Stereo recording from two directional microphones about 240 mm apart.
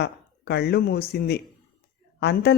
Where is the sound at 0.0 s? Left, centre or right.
Left.